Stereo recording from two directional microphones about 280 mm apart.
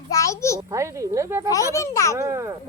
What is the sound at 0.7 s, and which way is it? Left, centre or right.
Speech, centre.